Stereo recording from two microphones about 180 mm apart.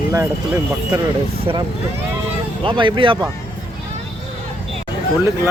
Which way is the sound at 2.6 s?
25° right (ahead or behind).